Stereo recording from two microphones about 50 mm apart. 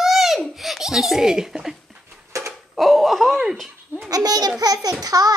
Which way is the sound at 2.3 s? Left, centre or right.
Right.